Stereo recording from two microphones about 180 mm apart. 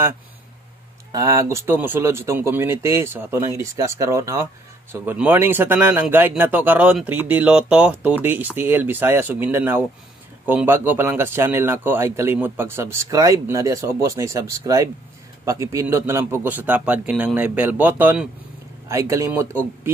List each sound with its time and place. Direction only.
1.1 s a man's voice: 15° right (ahead or behind)